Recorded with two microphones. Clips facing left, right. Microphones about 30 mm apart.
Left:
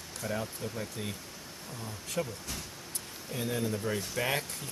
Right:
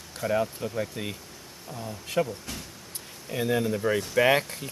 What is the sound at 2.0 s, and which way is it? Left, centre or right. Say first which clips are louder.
Speech: right 8 dB; right.